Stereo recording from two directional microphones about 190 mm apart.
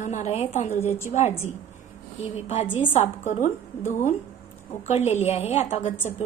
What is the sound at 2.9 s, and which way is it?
Speech, 40° left (ahead or behind).